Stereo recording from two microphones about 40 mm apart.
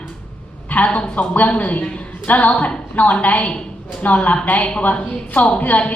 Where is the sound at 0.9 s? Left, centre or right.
Left.